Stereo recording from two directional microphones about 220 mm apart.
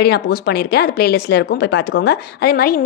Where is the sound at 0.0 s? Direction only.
45° left (ahead or behind).